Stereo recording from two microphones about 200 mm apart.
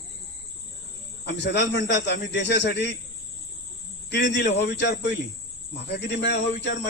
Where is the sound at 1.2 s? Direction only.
60° left (ahead or behind).